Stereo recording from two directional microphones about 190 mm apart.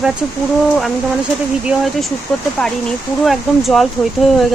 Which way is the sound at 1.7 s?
Centre (ahead or behind).